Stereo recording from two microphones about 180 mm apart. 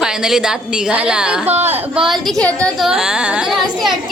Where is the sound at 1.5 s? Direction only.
35° right (ahead or behind).